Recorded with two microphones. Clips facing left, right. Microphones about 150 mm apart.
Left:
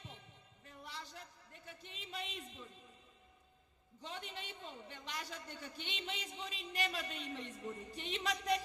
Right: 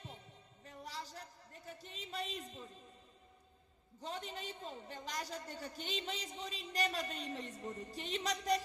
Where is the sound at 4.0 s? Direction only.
40° right (ahead or behind).